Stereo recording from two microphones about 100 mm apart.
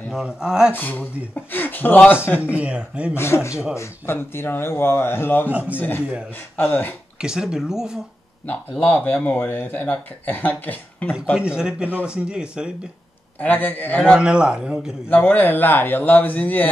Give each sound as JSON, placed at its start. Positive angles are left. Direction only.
{"t": 0.1, "sound": "a man's voice", "side_deg": -5}
{"t": 0.7, "sound": "speech", "side_deg": 20}
{"t": 2.5, "sound": "a man's voice", "side_deg": -10}
{"t": 3.2, "sound": "speech", "side_deg": 25}
{"t": 5.5, "sound": "a man's voice", "side_deg": -15}
{"t": 5.8, "sound": "speech", "side_deg": 20}
{"t": 7.2, "sound": "a man's voice", "side_deg": -5}
{"t": 8.5, "sound": "speech", "side_deg": 15}
{"t": 11.3, "sound": "a man's voice", "side_deg": -10}
{"t": 13.4, "sound": "speech", "side_deg": 20}
{"t": 14.1, "sound": "a man's voice", "side_deg": -10}
{"t": 15.0, "sound": "speech", "side_deg": 15}